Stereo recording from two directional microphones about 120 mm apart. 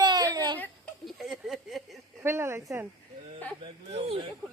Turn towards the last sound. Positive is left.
turn(degrees=-55)  # may be behind; listen again after turning